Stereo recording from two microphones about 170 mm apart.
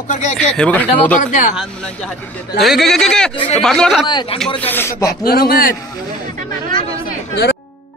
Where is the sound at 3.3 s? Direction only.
30° left (ahead or behind).